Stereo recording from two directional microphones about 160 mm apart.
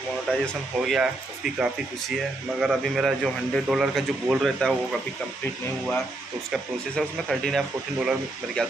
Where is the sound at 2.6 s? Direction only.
Centre (ahead or behind).